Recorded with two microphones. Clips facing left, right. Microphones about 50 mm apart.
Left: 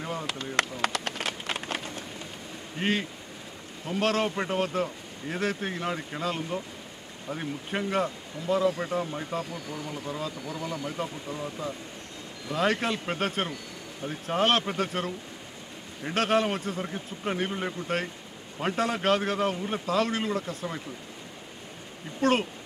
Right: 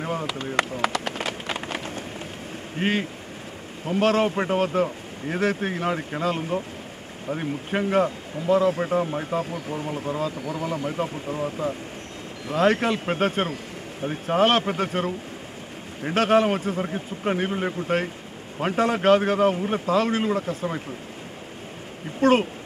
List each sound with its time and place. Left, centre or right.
0.0 s a sound: centre
2.8 s speech: centre
8.6 s speech: right
12.4 s speech: centre
22.2 s speech: centre